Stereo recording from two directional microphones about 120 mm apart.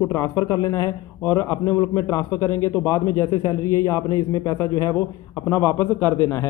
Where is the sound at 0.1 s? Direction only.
30° left (ahead or behind).